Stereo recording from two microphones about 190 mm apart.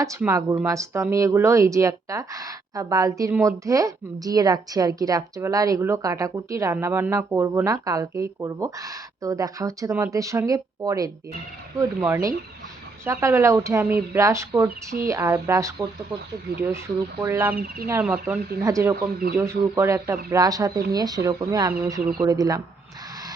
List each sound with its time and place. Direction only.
0.0 s speech: 15° right (ahead or behind)
13.1 s speech: 15° right (ahead or behind)